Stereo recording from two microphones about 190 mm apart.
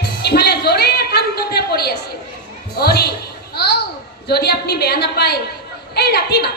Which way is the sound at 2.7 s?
55° left (ahead or behind).